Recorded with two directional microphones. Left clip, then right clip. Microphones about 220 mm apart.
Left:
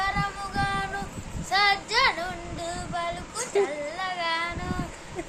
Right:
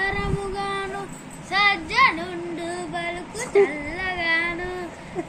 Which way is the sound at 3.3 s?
20° left (ahead or behind).